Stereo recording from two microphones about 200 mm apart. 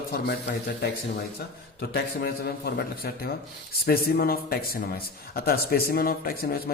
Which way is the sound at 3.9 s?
50° left (ahead or behind).